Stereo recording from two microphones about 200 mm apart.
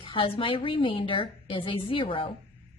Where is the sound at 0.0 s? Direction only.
25° left (ahead or behind).